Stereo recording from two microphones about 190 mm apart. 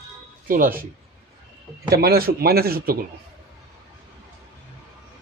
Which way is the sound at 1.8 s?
55° right (ahead or behind).